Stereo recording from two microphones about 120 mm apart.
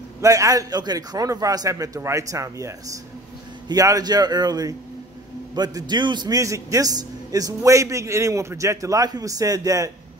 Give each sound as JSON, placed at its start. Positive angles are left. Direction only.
{"t": 0.2, "sound": "a man's voice", "side_deg": -30}